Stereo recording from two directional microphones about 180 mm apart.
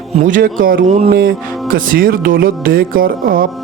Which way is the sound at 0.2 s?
45° right (ahead or behind).